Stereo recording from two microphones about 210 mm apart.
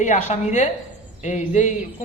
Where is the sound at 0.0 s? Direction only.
35° left (ahead or behind).